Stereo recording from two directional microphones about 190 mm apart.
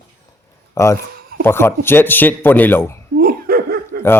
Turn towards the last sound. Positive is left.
turn(degrees=-55)  # may be behind; listen again after turning